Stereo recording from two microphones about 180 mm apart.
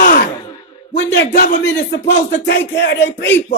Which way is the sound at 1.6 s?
75° left (ahead or behind).